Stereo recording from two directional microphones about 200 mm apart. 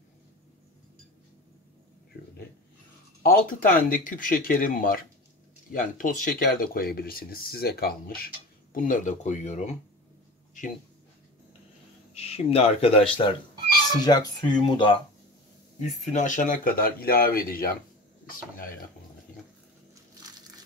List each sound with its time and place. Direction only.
3.2 s speech: 45° left (ahead or behind)
12.1 s speech: 30° left (ahead or behind)
15.8 s speech: 35° left (ahead or behind)
20.2 s crushing: 20° right (ahead or behind)